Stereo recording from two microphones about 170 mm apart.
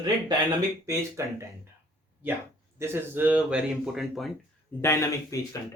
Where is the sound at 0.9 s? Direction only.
15° right (ahead or behind).